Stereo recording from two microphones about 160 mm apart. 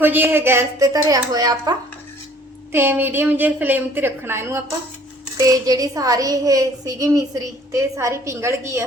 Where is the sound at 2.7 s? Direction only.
15° right (ahead or behind).